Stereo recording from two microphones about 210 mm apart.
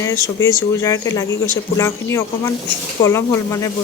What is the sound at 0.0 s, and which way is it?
A woman's voice, 15° left (ahead or behind).